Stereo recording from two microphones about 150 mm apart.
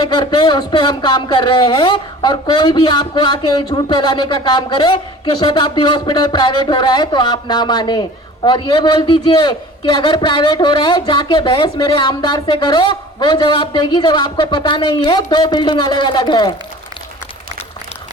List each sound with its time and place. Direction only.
0.0 s a man's voice: 30° left (ahead or behind)